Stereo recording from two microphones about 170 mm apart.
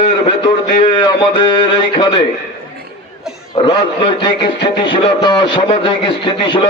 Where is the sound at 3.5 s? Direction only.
30° left (ahead or behind).